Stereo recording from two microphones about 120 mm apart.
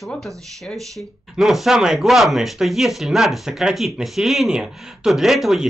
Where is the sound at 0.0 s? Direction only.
Centre (ahead or behind).